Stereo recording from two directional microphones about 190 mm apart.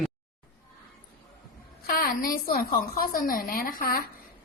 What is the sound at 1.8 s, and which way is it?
A woman's voice, 50° left (ahead or behind).